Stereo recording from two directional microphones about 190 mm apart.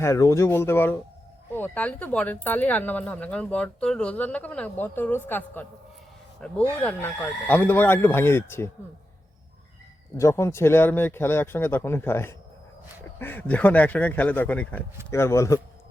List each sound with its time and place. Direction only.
0.0 s speech: 15° left (ahead or behind)
10.2 s speech: 15° left (ahead or behind)